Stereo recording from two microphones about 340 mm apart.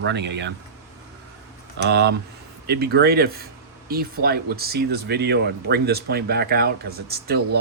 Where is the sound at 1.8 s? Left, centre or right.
Right.